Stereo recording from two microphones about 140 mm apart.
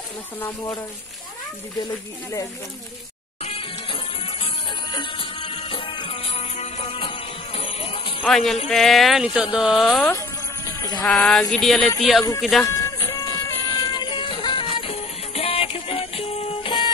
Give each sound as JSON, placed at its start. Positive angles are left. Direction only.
{"t": 3.4, "sound": "music", "side_deg": 40}
{"t": 8.3, "sound": "speech", "side_deg": 0}
{"t": 10.0, "sound": "music", "side_deg": 20}
{"t": 11.1, "sound": "speech", "side_deg": 5}
{"t": 12.6, "sound": "music", "side_deg": 25}